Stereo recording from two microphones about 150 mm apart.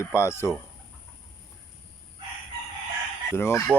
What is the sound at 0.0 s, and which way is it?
Chicken, 20° left (ahead or behind).